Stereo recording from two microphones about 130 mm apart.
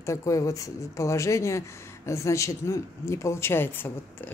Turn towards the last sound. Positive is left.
turn(degrees=15)  # may be behind; listen again after turning